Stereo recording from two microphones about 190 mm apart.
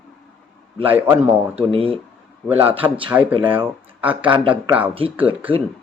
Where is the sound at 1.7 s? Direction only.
30° right (ahead or behind).